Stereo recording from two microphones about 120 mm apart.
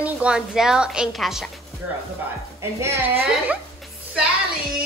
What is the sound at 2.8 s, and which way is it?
Speech, 20° right (ahead or behind).